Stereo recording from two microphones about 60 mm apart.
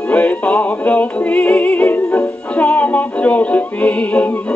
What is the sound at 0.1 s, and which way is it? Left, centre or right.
Music, left.